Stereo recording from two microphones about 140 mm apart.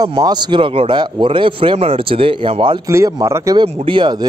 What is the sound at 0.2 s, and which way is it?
A man's voice, 30° right (ahead or behind).